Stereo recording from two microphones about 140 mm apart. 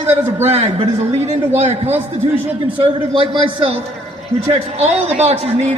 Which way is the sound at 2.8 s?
40° right (ahead or behind).